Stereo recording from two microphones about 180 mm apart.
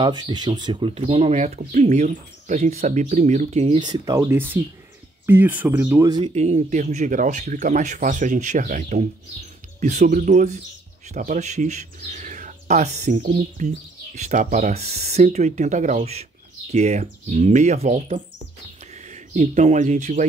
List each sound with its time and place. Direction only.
0.0 s speech: 25° right (ahead or behind)
4.0 s speech: 20° right (ahead or behind)
6.0 s speech: 25° right (ahead or behind)
6.3 s speech: 40° right (ahead or behind)